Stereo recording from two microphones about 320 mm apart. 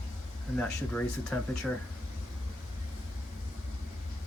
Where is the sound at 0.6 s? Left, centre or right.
Centre.